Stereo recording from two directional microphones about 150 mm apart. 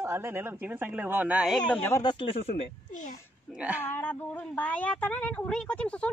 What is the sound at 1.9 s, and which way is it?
Speech, 30° left (ahead or behind).